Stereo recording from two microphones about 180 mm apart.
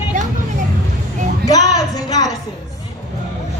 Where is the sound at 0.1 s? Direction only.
45° right (ahead or behind).